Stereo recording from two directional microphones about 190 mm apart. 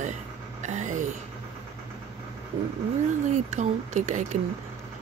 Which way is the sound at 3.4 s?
40° right (ahead or behind).